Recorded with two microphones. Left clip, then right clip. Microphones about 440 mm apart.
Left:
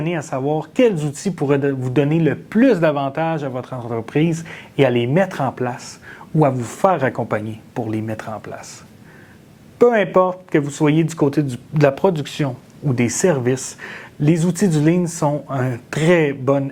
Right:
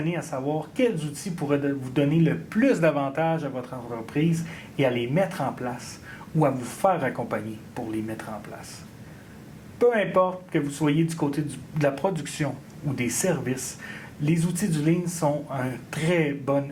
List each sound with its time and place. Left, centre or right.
0.1 s speech: left
9.7 s speech: left